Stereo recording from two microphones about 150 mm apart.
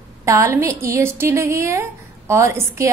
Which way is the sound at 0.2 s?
20° right (ahead or behind).